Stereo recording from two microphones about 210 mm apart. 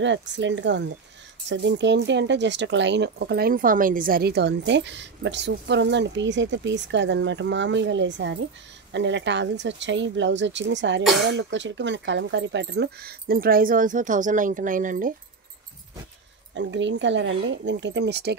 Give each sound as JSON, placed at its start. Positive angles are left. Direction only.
{"t": 0.0, "sound": "speech", "side_deg": -60}
{"t": 16.5, "sound": "speech", "side_deg": -60}